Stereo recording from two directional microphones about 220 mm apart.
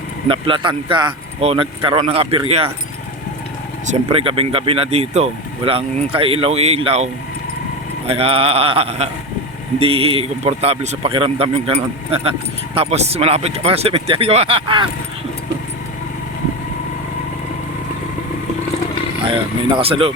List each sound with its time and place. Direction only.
0.3 s speech: 25° right (ahead or behind)
3.8 s speech: 25° right (ahead or behind)
19.2 s speech: 25° right (ahead or behind)